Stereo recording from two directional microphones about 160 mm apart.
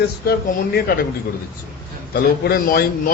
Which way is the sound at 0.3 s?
80° left.